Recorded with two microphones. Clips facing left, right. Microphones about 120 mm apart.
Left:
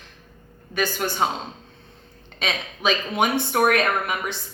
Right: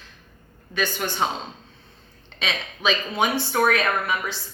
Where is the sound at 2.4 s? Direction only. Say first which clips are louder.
Left 1 dB; 45° left (ahead or behind).